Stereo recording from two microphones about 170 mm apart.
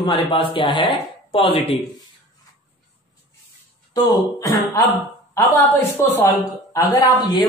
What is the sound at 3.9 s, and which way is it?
Speech, 20° left (ahead or behind).